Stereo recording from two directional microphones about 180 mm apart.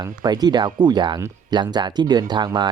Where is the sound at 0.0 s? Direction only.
20° right (ahead or behind).